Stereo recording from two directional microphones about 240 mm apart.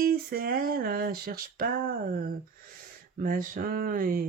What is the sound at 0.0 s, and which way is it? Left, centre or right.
Speech, right.